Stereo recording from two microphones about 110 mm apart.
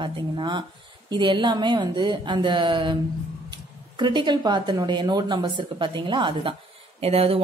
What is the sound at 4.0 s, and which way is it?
Speech, 45° right (ahead or behind).